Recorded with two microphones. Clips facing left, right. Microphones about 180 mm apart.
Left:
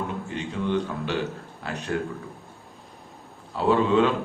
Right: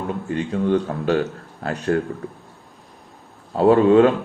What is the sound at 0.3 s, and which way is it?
Speech, 45° right (ahead or behind).